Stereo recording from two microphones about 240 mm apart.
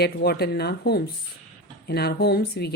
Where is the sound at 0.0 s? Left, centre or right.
Left.